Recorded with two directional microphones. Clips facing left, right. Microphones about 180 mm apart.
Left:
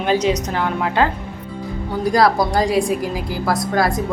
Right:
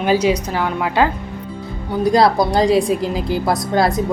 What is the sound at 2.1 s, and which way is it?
A woman's voice, 25° right (ahead or behind).